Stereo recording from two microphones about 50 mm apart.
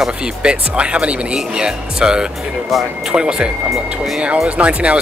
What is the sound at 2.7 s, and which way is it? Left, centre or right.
Speech, centre.